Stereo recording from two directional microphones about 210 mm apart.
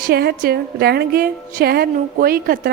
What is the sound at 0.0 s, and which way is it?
A woman's voice, 50° right (ahead or behind).